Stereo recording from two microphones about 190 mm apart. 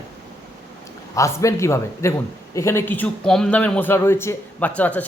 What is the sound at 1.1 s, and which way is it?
A man's voice, 15° left (ahead or behind).